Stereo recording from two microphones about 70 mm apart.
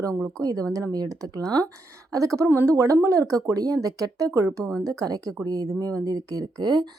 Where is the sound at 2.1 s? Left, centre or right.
Right.